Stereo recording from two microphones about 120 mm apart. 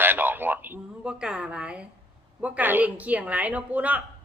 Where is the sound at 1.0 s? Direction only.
10° right (ahead or behind).